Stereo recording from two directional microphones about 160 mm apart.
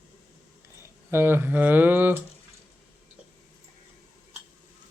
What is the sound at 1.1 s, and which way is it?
Speech, 15° right (ahead or behind).